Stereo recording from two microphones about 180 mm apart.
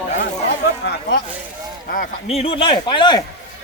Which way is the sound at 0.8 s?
75° left (ahead or behind).